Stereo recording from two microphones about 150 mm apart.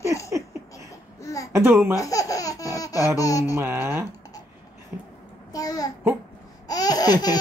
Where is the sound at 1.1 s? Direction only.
20° left (ahead or behind).